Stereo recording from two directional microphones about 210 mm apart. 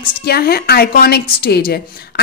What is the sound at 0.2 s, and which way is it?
A woman's voice, 50° left (ahead or behind).